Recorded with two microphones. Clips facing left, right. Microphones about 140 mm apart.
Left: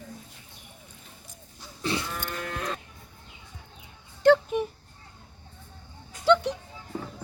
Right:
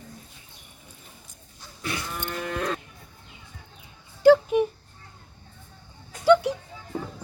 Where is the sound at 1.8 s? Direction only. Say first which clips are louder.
Left 3 dB; 30° left (ahead or behind).